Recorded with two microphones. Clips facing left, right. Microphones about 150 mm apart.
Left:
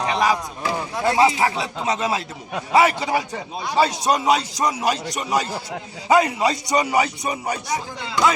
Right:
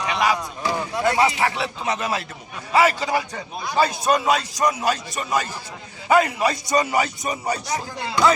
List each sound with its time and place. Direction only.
0.0 s chop: 35° left (ahead or behind)
1.0 s speech: 25° left (ahead or behind)
1.5 s a man's voice: 15° left (ahead or behind)